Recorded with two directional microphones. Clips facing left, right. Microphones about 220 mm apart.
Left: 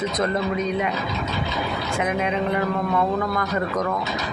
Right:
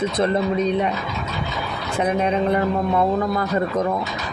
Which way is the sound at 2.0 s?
35° right (ahead or behind).